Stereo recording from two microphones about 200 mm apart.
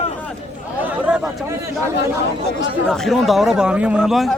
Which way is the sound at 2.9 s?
Centre (ahead or behind).